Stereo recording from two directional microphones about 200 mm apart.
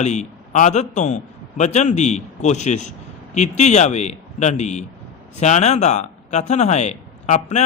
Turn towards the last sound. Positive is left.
turn(degrees=35)  # may be behind; listen again after turning